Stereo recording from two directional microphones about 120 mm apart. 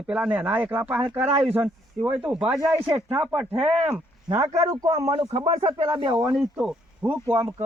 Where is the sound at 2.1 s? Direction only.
10° right (ahead or behind).